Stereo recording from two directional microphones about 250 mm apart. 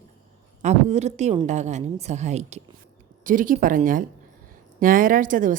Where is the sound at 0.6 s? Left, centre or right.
Right.